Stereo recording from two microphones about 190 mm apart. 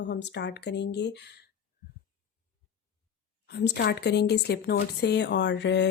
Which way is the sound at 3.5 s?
60° left (ahead or behind).